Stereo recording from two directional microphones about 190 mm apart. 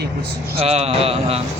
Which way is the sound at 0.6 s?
35° right (ahead or behind).